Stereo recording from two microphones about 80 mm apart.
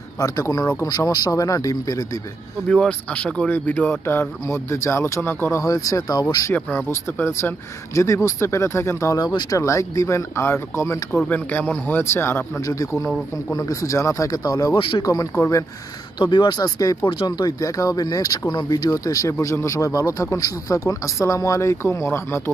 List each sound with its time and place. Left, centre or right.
0.2 s speech: left
2.7 s speech: centre; by 5.6 s left
5.6 s speech: left
7.2 s a man's voice: left
9.2 s speech: left
9.6 s a man's voice: left
11.2 s speech: left
13.5 s speech: left
15.3 s a man's voice: left
16.2 s speech: left
18.9 s a man's voice: left